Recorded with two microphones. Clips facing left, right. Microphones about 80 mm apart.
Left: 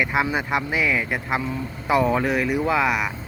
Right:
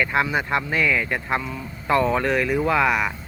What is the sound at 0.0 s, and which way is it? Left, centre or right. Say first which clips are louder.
Speech: right 1 dB; centre.